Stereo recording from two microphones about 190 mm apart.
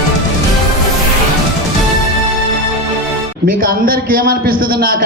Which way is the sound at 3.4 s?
50° right (ahead or behind).